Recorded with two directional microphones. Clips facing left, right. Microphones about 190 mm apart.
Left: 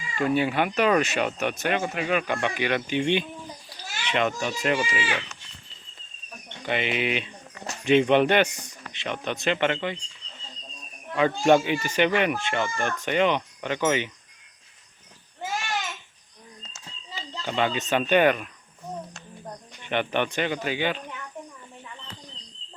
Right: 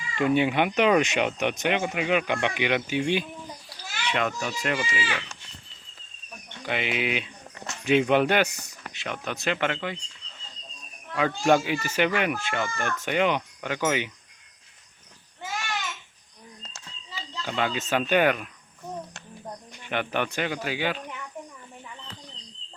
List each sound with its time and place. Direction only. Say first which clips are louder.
0.2 s speech: right 1 dB; 20° right (ahead or behind)
3.7 s children playing: even; centre (ahead or behind)
4.7 s speech: left 3 dB; 15° left (ahead or behind)
6.7 s speech: left 2 dB; 5° right (ahead or behind)
11.1 s speech: left 2 dB; centre (ahead or behind)
17.4 s speech: left 2 dB; 5° right (ahead or behind)
19.8 s speech: left 2 dB; 5° right (ahead or behind)